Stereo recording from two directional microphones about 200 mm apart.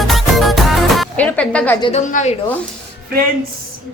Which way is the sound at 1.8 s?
30° left (ahead or behind).